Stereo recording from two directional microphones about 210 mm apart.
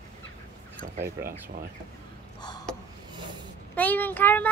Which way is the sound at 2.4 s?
20° left (ahead or behind).